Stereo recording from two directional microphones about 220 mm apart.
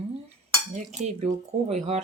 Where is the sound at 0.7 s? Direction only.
30° right (ahead or behind).